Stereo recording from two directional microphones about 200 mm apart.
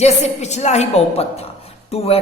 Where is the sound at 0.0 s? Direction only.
35° left (ahead or behind).